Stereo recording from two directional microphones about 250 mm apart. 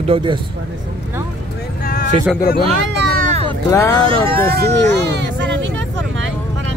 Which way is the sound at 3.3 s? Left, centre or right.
Right.